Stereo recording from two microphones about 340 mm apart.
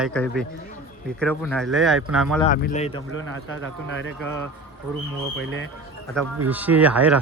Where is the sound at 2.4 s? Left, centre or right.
Left.